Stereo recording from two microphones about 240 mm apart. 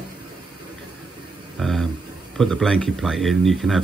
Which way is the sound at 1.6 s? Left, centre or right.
Centre.